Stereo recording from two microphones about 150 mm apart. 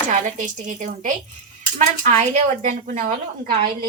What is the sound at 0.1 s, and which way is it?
A woman's voice, 60° right (ahead or behind).